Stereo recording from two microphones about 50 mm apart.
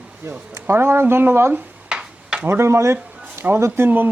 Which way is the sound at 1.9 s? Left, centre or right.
Centre.